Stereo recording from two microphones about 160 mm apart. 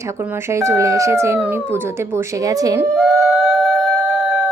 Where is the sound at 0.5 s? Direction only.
20° right (ahead or behind).